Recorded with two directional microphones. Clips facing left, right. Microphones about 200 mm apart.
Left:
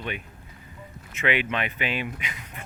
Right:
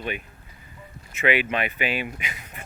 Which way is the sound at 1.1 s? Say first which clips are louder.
Right 3 dB; 5° right (ahead or behind).